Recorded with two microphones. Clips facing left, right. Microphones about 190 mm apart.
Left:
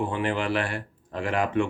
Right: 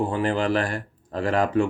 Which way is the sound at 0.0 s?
40° right (ahead or behind).